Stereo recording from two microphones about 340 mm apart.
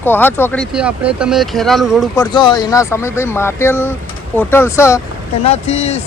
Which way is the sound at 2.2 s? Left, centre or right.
Centre.